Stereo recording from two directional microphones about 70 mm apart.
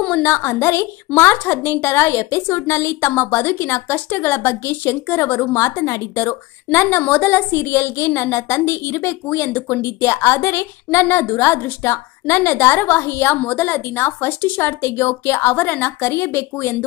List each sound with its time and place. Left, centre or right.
0.2 s a woman's voice: left